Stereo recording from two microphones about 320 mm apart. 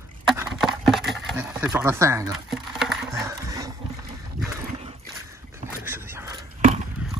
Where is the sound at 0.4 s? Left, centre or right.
Centre.